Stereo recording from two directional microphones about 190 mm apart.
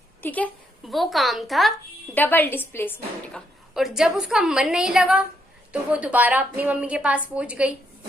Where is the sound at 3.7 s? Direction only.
5° right (ahead or behind).